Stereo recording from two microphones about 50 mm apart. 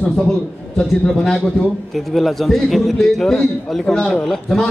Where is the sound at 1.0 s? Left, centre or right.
Centre.